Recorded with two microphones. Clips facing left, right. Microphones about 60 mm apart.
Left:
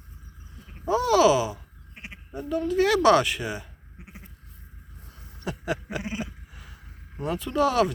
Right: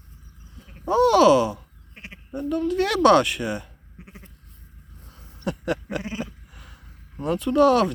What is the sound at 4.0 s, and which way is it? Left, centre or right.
Goat, centre.